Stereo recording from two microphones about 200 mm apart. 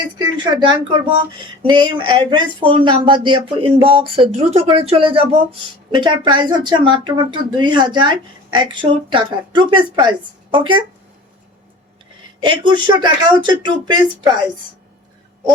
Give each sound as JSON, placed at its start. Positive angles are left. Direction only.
{"t": 0.2, "sound": "speech", "side_deg": -20}
{"t": 12.4, "sound": "speech", "side_deg": -25}